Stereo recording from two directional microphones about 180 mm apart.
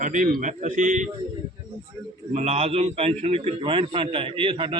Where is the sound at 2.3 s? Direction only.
35° right (ahead or behind).